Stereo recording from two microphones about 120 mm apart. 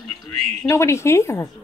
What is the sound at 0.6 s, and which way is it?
Speech, 25° left (ahead or behind).